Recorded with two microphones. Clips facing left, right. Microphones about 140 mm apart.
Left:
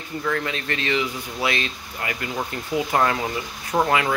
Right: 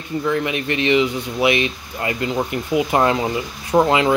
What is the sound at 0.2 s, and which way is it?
Speech, 20° right (ahead or behind).